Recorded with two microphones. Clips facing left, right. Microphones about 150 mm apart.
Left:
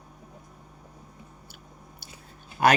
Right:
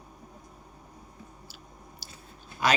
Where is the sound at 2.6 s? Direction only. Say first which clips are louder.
Left 5 dB; 55° left (ahead or behind).